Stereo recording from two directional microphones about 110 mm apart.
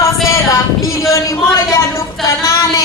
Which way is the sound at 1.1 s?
30° left (ahead or behind).